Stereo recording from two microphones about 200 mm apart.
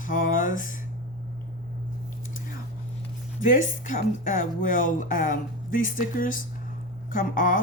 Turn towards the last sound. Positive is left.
turn(degrees=40)  # may be behind; listen again after turning